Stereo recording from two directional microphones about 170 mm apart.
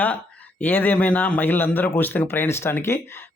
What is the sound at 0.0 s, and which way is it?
Speech, 10° left (ahead or behind).